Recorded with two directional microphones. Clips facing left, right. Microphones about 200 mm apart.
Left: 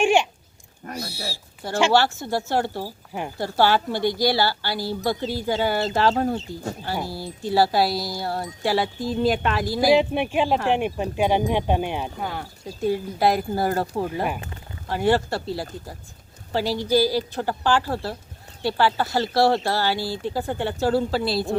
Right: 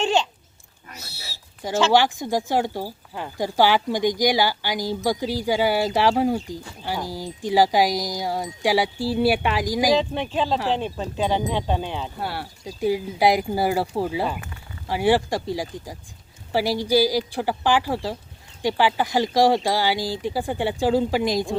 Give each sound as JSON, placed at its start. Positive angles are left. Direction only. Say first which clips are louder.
{"t": 0.0, "sound": "a sound", "louder": "left 3 dB", "side_deg": 10}
{"t": 0.8, "sound": "a sound", "louder": "left 11 dB", "side_deg": 55}
{"t": 1.9, "sound": "speech", "louder": "right 3 dB", "side_deg": -15}
{"t": 3.1, "sound": "speech", "louder": "left 2 dB", "side_deg": 15}
{"t": 3.3, "sound": "speech", "louder": "right 1 dB", "side_deg": -15}
{"t": 9.9, "sound": "speech", "louder": "left 3 dB", "side_deg": 15}
{"t": 12.2, "sound": "speech", "louder": "even", "side_deg": -5}